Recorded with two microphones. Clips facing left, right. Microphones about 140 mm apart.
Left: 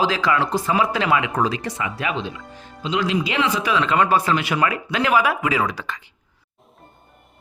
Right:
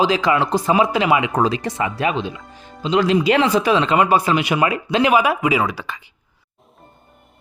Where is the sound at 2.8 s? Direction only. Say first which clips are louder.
Right 6 dB; 40° right (ahead or behind).